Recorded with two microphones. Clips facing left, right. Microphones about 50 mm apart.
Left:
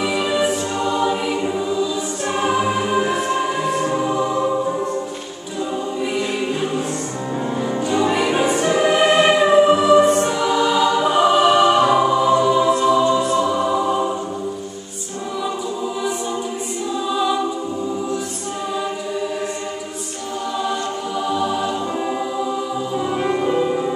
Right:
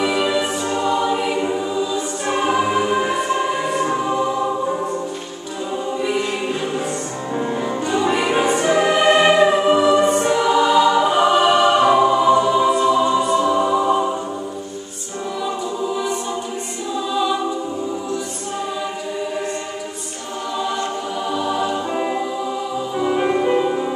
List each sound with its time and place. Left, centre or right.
0.0 s music: centre
5.9 s choir: centre
7.3 s music: centre
17.1 s music: centre
21.3 s music: centre
21.9 s music: right